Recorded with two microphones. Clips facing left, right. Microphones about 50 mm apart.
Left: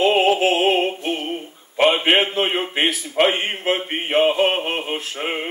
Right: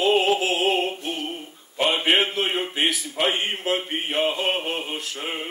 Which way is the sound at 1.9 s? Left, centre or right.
Left.